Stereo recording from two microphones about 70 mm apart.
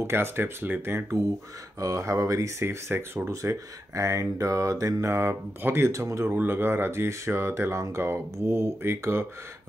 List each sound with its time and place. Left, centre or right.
0.0 s speech: right
1.8 s speech: right
2.6 s speech: right
3.3 s speech: right
5.9 s speech: right
6.3 s speech: right